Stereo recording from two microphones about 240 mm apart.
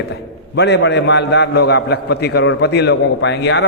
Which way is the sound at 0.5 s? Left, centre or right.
Left.